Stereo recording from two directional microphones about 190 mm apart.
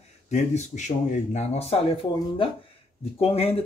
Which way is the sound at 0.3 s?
40° left (ahead or behind).